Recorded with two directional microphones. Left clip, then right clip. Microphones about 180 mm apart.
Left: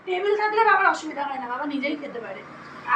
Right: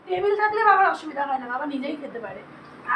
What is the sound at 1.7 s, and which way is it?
Speech, 25° right (ahead or behind).